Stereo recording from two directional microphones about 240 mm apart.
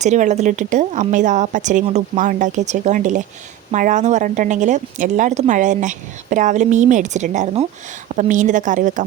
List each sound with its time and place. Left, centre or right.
0.0 s speech: right